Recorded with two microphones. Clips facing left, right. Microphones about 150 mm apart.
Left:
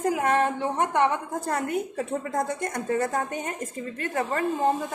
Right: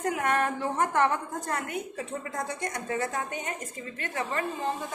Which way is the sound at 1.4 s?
30° left (ahead or behind).